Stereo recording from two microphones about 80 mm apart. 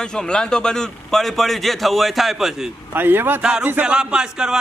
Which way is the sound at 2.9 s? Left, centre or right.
Right.